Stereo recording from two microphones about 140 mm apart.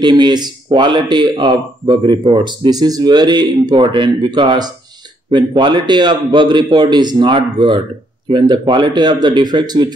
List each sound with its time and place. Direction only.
0.0 s speech: 30° right (ahead or behind)